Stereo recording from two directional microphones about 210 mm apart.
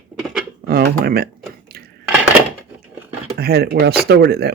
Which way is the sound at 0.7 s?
50° right (ahead or behind).